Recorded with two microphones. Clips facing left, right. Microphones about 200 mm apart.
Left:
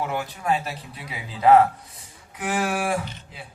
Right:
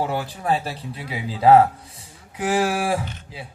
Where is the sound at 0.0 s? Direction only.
30° right (ahead or behind).